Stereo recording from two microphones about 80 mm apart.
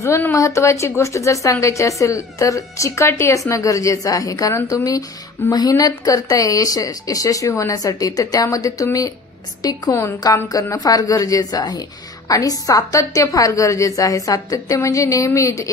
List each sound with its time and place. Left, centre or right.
0.0 s a woman's voice: left